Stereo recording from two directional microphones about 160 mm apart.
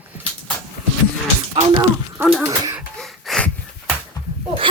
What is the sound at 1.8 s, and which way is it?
Speech, 10° right (ahead or behind).